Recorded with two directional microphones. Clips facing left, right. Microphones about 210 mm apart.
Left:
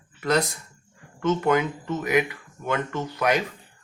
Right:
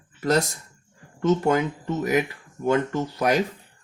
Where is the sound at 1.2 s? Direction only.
35° right (ahead or behind).